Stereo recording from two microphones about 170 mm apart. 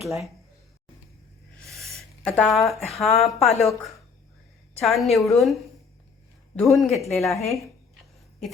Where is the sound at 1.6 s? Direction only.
Centre (ahead or behind).